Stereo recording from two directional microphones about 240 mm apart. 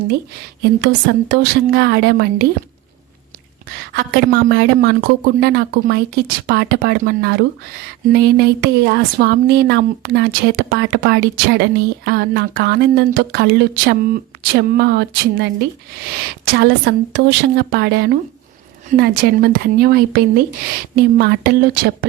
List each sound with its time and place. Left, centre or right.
0.6 s speech: right
3.9 s speech: right
16.6 s speech: right